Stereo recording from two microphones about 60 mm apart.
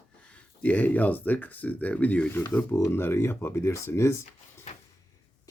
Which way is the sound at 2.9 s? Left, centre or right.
Left.